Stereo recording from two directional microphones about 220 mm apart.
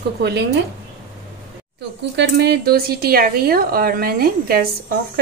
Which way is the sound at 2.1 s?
50° right (ahead or behind).